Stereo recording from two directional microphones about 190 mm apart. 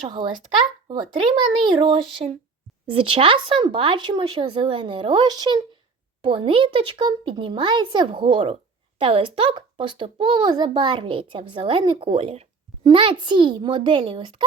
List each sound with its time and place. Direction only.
0.1 s speech: 25° right (ahead or behind)